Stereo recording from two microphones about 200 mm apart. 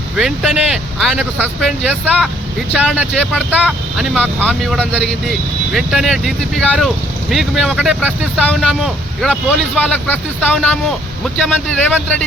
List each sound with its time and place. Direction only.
0.2 s speech: centre (ahead or behind)
2.7 s speech: 5° right (ahead or behind)
4.1 s speech: 5° left (ahead or behind)